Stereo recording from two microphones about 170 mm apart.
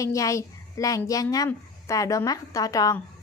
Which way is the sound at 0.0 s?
20° left (ahead or behind).